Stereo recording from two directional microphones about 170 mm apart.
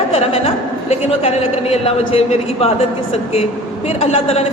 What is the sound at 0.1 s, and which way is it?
A woman's voice, 35° left (ahead or behind).